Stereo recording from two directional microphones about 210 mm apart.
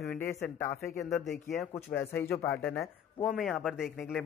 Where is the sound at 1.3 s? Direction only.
40° left (ahead or behind).